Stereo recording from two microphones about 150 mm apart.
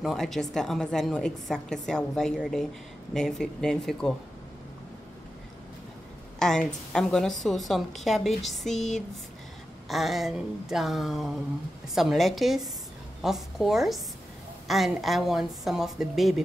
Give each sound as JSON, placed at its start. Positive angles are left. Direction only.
{"t": 0.0, "sound": "a woman's voice", "side_deg": 0}
{"t": 6.4, "sound": "a woman's voice", "side_deg": 5}